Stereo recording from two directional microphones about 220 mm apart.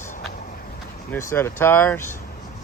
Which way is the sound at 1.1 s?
10° left (ahead or behind).